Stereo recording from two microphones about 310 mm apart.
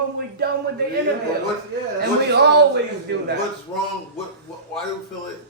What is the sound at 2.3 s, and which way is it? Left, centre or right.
Speech, right.